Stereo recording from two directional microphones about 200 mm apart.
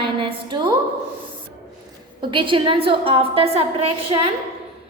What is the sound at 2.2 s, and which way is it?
A woman's voice, 25° right (ahead or behind).